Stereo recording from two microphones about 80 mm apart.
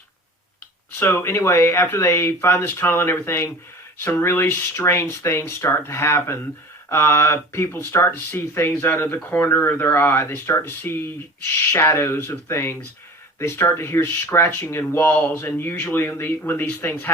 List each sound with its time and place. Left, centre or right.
0.9 s speech: left
9.1 s speech: centre
9.5 s speech: left